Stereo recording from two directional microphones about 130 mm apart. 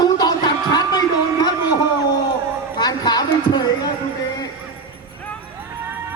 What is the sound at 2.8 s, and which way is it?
Speech, 30° left (ahead or behind).